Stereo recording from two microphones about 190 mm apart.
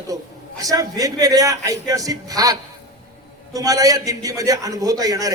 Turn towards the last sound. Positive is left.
turn(degrees=-20)  # may be behind; listen again after turning